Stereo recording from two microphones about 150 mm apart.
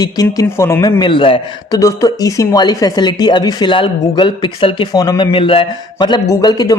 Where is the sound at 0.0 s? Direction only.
25° left (ahead or behind).